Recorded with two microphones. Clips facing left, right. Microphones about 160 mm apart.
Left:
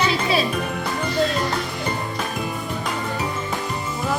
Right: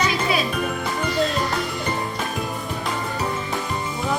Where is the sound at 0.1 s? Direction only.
30° left (ahead or behind).